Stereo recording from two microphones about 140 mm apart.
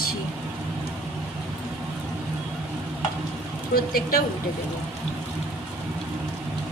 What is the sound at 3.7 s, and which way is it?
Speech, 90° left.